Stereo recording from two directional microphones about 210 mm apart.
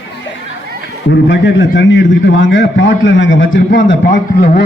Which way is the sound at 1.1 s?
60° left (ahead or behind).